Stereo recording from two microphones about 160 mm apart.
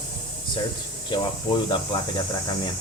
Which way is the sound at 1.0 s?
30° left (ahead or behind).